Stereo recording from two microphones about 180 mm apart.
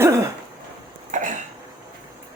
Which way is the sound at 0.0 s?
15° right (ahead or behind).